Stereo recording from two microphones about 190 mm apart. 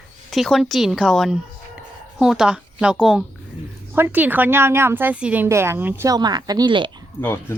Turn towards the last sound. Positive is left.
turn(degrees=10)  # may be behind; listen again after turning